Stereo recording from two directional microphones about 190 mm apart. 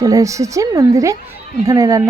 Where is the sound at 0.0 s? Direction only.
20° right (ahead or behind).